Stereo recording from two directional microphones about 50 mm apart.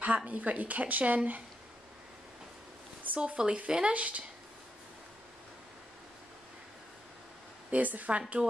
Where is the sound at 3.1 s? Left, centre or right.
Right.